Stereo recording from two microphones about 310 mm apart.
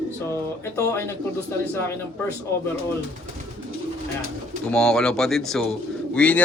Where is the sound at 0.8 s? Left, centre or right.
Centre.